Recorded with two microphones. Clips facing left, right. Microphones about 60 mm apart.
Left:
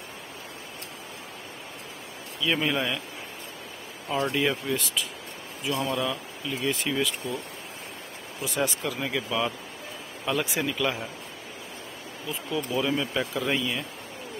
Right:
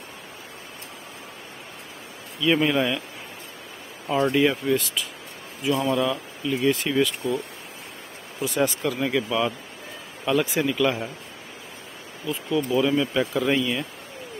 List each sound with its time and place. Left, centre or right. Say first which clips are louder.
2.4 s speech: right 5 dB; centre
4.1 s speech: right 5 dB; right
4.4 s speech: right 5 dB; centre
8.4 s speech: right 5 dB; centre
12.3 s speech: right 6 dB; centre